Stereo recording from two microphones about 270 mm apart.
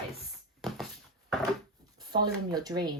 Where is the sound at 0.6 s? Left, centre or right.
Centre.